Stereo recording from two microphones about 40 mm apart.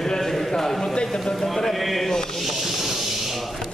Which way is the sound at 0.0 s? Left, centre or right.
Centre.